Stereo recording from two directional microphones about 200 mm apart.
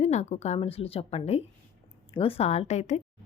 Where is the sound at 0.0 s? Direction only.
35° left (ahead or behind).